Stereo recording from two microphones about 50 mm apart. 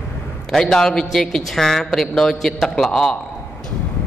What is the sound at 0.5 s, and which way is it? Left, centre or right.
A man's voice, centre.